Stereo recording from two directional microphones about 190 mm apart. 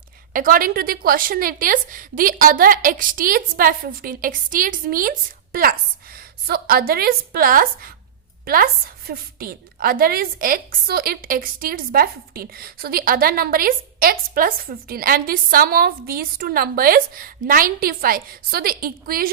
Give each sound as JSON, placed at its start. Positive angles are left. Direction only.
{"t": 0.3, "sound": "a woman's voice", "side_deg": -45}